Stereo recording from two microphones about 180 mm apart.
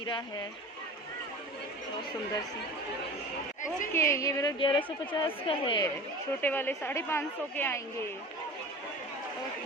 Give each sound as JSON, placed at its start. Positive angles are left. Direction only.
{"t": 3.9, "sound": "a woman's voice", "side_deg": 15}
{"t": 6.4, "sound": "a woman's voice", "side_deg": 10}